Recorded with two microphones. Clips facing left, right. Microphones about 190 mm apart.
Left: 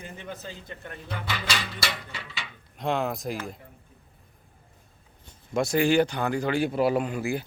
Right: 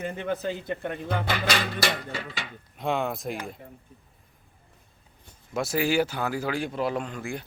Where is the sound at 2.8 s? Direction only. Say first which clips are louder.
Even; centre (ahead or behind).